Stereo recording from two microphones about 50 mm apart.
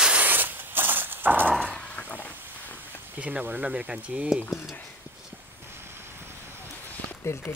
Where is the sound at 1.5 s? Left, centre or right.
Centre.